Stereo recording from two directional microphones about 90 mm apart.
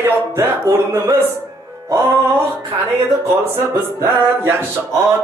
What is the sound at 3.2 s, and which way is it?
Speech, 30° right (ahead or behind).